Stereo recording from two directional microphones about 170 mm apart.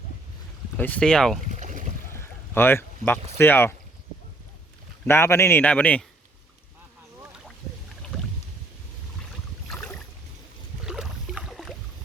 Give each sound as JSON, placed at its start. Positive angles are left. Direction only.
{"t": 0.8, "sound": "speech", "side_deg": 10}
{"t": 1.5, "sound": "boat", "side_deg": -45}
{"t": 2.1, "sound": "boat", "side_deg": 15}
{"t": 3.3, "sound": "a man's voice", "side_deg": 15}
{"t": 5.0, "sound": "a man's voice", "side_deg": 15}
{"t": 9.6, "sound": "boat", "side_deg": 5}